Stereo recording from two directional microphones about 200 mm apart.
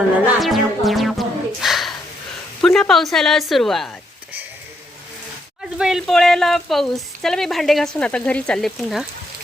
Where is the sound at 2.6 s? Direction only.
Centre (ahead or behind).